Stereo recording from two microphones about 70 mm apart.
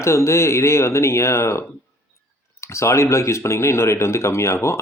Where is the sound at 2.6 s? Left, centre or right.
Left.